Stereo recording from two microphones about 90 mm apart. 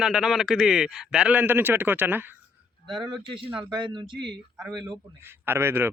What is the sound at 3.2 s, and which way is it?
Speech, 70° right (ahead or behind).